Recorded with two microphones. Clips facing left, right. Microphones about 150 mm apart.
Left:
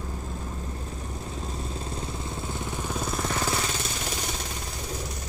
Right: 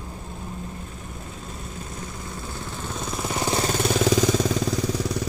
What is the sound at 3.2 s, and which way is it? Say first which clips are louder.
Vehicle: right 4 dB; 10° right (ahead or behind).